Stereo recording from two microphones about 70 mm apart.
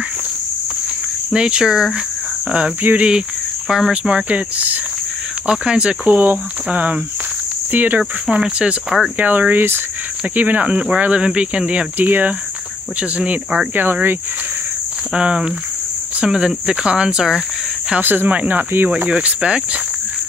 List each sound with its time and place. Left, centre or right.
1.3 s speech: centre
3.1 s cricket: centre
3.9 s speech: centre
6.1 s speech: right
15.1 s speech: centre
18.0 s speech: right
19.0 s speech: centre